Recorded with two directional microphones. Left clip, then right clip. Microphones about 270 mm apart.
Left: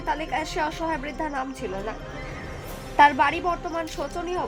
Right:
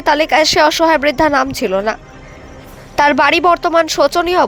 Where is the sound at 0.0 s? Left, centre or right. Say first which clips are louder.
Right 16 dB; right.